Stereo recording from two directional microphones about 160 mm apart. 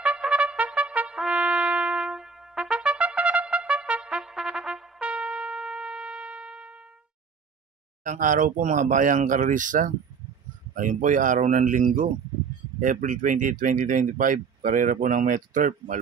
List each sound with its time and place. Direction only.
0.0 s trumpet: 10° right (ahead or behind)
8.0 s speech: 55° right (ahead or behind)